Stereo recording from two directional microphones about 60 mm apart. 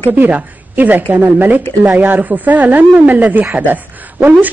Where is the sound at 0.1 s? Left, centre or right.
Right.